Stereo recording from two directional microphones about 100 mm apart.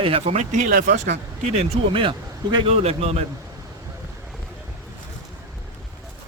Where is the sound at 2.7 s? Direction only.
90° right.